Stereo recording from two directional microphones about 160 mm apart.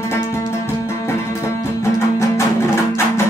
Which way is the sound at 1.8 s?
20° left (ahead or behind).